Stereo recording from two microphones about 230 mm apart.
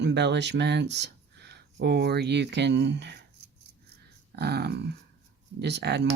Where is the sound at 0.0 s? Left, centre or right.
Right.